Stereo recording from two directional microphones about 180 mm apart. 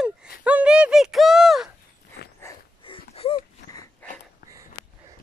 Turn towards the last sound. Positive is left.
turn(degrees=5)  # may be behind; listen again after turning